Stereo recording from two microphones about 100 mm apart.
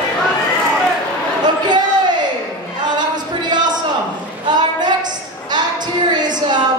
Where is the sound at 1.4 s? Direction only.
45° right (ahead or behind).